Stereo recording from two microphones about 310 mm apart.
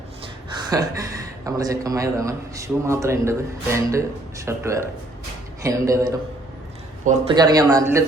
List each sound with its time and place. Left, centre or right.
0.7 s a man's voice: centre
7.0 s a man's voice: right
7.3 s a man's voice: centre